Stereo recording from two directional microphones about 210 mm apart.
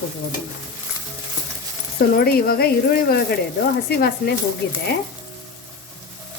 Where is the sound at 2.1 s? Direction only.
45° left (ahead or behind).